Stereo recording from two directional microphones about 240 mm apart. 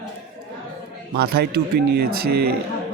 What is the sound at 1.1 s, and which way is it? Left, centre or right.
Speech, right.